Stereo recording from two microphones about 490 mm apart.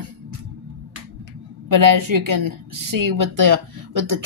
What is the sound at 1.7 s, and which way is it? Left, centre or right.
A woman's voice, right.